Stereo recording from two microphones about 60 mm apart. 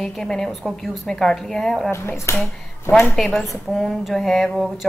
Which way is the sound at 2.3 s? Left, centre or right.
Left.